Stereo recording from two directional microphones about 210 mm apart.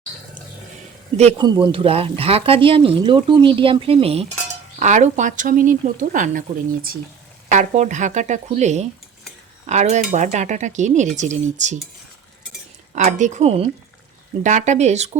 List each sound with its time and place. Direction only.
1.1 s speech: 30° right (ahead or behind)
12.9 s speech: 35° right (ahead or behind)